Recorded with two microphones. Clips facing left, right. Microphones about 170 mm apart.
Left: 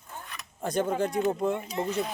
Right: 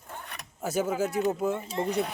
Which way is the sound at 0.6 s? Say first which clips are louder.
Left 1 dB; 5° right (ahead or behind).